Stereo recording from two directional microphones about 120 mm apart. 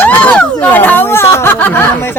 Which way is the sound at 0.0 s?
15° left (ahead or behind).